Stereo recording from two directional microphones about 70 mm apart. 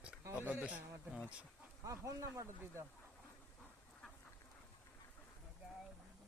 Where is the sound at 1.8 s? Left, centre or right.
Right.